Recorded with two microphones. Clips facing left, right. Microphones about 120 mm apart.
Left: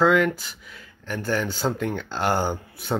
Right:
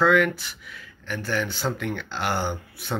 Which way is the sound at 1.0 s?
40° left (ahead or behind).